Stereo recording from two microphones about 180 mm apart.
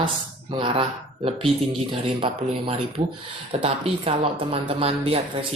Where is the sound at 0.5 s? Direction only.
30° right (ahead or behind).